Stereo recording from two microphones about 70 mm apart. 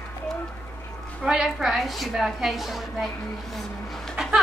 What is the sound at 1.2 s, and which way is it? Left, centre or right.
A woman's voice, centre.